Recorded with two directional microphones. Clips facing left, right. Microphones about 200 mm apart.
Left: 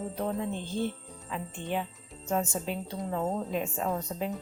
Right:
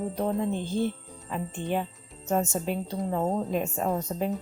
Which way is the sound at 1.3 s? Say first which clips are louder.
Right 4 dB; 45° right (ahead or behind).